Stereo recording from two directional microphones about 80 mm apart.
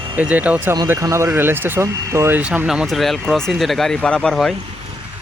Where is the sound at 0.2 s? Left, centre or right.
Centre.